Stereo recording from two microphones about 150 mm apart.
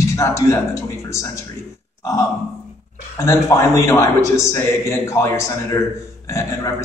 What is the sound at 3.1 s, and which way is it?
A man's voice, 20° left (ahead or behind).